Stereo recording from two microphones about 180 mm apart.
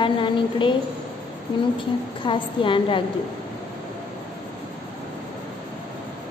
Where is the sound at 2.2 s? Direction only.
25° left (ahead or behind).